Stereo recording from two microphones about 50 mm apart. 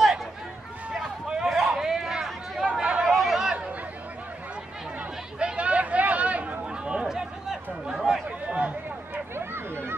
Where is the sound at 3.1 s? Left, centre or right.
Centre.